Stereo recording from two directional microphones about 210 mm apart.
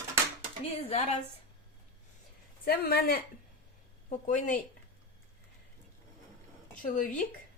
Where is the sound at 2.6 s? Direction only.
50° left (ahead or behind).